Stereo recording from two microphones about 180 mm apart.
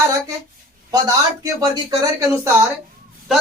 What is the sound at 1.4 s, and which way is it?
Speech, 20° right (ahead or behind).